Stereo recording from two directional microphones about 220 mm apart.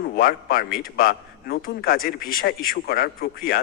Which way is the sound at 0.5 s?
40° left (ahead or behind).